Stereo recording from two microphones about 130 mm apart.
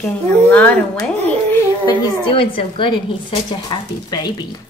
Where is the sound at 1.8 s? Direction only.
40° left (ahead or behind).